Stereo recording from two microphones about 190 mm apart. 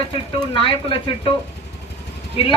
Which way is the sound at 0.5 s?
25° left (ahead or behind).